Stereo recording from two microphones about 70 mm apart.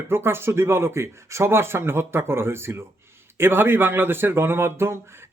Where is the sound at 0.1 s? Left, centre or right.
Right.